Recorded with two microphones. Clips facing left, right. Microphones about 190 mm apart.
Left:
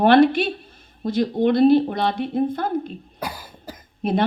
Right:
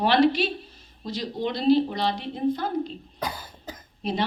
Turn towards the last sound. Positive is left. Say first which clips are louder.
# left 6 dB
turn(degrees=55)  # may be behind; listen again after turning